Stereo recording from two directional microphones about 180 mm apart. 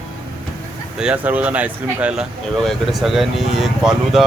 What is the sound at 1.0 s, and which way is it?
Speech, 5° right (ahead or behind).